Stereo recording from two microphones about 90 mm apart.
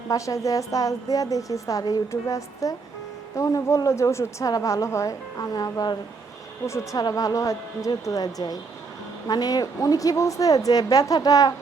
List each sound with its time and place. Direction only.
0.1 s a woman's voice: 40° left (ahead or behind)
6.7 s a woman's voice: 35° left (ahead or behind)